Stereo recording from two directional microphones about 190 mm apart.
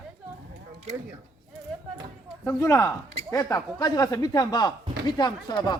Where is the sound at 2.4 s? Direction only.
15° left (ahead or behind).